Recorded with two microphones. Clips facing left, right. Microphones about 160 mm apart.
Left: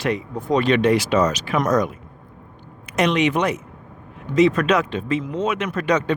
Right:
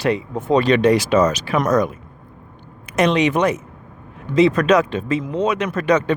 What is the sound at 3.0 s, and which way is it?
Speech, 35° right (ahead or behind).